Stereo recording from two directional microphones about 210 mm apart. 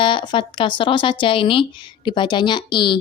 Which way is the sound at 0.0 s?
25° left (ahead or behind).